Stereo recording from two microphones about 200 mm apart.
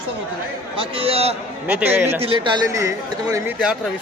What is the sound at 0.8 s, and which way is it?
Speech, 30° right (ahead or behind).